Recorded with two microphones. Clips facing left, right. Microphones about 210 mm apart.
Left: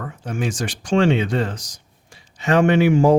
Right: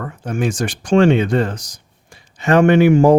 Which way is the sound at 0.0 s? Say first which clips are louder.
Right 4 dB; 50° right (ahead or behind).